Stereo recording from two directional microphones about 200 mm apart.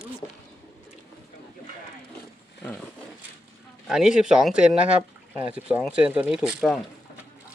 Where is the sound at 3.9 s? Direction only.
5° right (ahead or behind).